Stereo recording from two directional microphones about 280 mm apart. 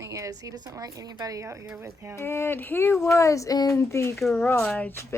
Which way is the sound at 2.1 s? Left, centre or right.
Centre.